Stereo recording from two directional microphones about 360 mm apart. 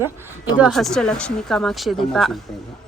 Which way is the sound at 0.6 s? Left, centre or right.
Centre.